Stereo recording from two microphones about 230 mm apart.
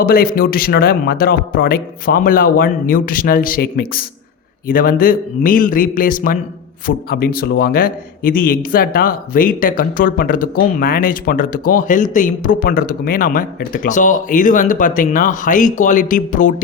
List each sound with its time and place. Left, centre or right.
0.0 s speech: left